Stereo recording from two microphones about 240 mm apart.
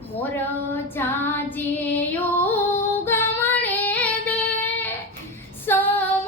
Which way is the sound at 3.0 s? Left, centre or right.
Centre.